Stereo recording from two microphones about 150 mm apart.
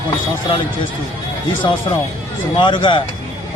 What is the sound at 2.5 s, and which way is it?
Speech, 30° left (ahead or behind).